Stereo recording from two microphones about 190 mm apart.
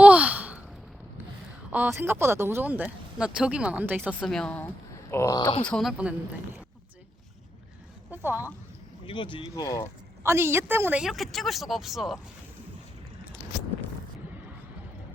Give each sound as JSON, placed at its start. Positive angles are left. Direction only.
{"t": 0.0, "sound": "sigh", "side_deg": -5}
{"t": 1.7, "sound": "speech", "side_deg": -10}
{"t": 5.6, "sound": "speech", "side_deg": 0}
{"t": 8.1, "sound": "speech", "side_deg": -10}
{"t": 9.0, "sound": "speech", "side_deg": 25}
{"t": 10.2, "sound": "speech", "side_deg": -15}